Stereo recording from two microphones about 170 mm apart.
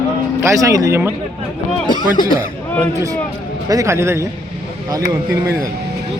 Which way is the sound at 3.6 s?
20° right (ahead or behind).